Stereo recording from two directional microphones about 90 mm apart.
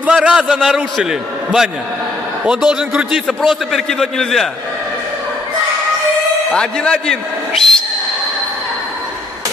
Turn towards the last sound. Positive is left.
turn(degrees=5)  # may be behind; listen again after turning